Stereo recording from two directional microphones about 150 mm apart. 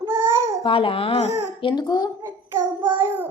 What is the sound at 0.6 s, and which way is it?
Speech, 35° left (ahead or behind).